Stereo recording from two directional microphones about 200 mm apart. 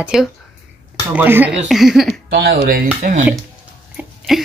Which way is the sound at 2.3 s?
55° right (ahead or behind).